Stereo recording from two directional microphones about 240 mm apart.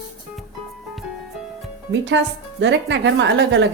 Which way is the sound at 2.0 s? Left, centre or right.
Right.